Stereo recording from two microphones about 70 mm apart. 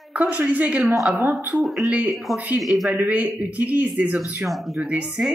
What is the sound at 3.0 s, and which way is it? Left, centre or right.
Speech, right.